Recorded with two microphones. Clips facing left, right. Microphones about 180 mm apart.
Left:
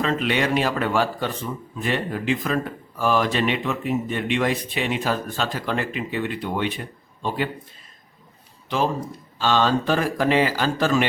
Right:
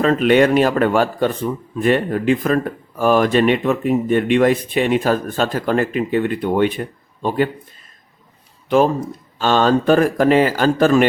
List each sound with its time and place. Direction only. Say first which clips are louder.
0.0 s a man's voice: right 9 dB; 50° right (ahead or behind)
8.7 s a man's voice: right 8 dB; 55° right (ahead or behind)